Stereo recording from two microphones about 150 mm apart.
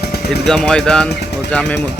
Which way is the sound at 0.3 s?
Centre (ahead or behind).